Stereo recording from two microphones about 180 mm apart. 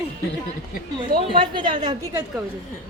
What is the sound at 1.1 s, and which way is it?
Speech, 55° right (ahead or behind).